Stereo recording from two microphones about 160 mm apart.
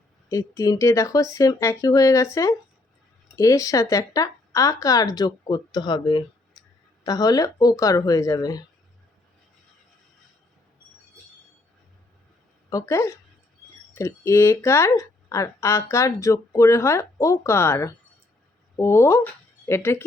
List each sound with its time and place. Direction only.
0.3 s speech: 20° left (ahead or behind)
12.7 s speech: 20° left (ahead or behind)